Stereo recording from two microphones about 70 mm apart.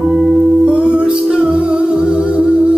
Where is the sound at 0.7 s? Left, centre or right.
Centre.